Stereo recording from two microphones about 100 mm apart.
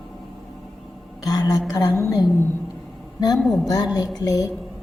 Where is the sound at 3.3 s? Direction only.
5° left (ahead or behind).